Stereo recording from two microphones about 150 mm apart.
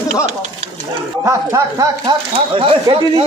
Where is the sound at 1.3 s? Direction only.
20° right (ahead or behind).